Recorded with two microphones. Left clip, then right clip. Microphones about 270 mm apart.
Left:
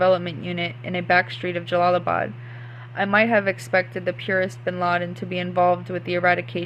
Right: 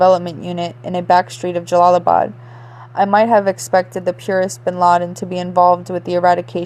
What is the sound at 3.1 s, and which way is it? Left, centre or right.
A woman's voice, centre.